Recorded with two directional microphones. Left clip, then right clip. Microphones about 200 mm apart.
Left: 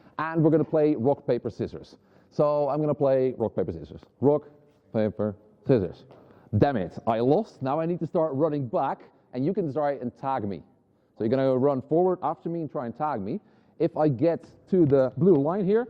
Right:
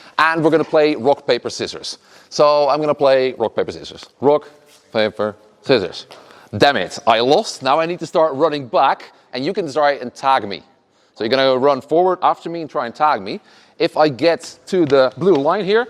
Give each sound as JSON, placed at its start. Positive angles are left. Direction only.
{"t": 0.0, "sound": "a man's voice", "side_deg": -10}